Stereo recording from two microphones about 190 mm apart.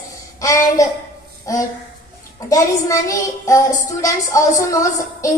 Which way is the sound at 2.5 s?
15° left (ahead or behind).